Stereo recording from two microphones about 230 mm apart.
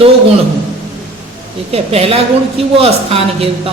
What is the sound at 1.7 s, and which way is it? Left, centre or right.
A man's voice, right.